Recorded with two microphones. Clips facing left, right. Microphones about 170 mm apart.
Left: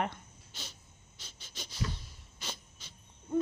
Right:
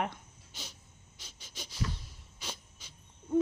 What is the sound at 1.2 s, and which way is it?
Pant, 10° right (ahead or behind).